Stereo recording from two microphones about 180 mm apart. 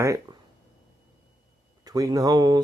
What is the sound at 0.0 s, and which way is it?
Speech, 15° right (ahead or behind).